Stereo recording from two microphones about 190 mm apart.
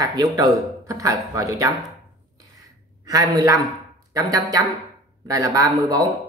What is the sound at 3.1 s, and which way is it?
Speech, 20° right (ahead or behind).